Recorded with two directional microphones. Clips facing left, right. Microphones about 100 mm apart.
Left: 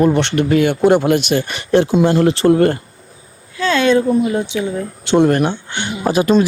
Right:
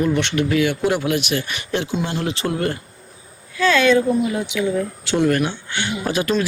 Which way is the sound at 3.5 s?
30° left (ahead or behind).